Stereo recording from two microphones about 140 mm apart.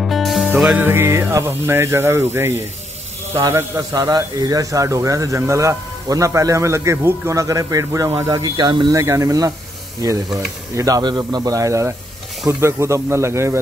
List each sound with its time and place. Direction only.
0.0 s music: centre (ahead or behind)
0.8 s a man's voice: 15° right (ahead or behind)